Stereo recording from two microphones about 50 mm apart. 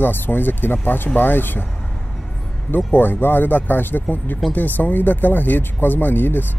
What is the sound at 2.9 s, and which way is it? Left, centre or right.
Speech, left.